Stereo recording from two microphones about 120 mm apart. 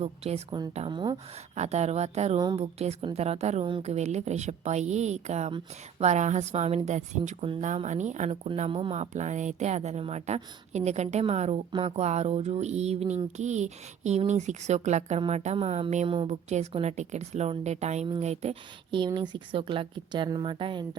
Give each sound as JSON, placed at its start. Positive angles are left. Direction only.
{"t": 0.0, "sound": "speech", "side_deg": -60}
{"t": 0.9, "sound": "a woman's voice", "side_deg": -35}
{"t": 1.5, "sound": "speech", "side_deg": -70}
{"t": 3.6, "sound": "speech", "side_deg": -45}
{"t": 3.8, "sound": "a sound", "side_deg": -70}
{"t": 7.9, "sound": "a woman's voice", "side_deg": -80}
{"t": 8.5, "sound": "a sound", "side_deg": -55}
{"t": 15.5, "sound": "speech", "side_deg": -55}
{"t": 16.0, "sound": "speech", "side_deg": -50}
{"t": 16.7, "sound": "a sound", "side_deg": -70}
{"t": 18.2, "sound": "speech", "side_deg": -65}
{"t": 18.9, "sound": "a woman's voice", "side_deg": -40}